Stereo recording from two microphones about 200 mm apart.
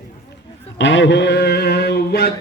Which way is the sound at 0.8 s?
65° left (ahead or behind).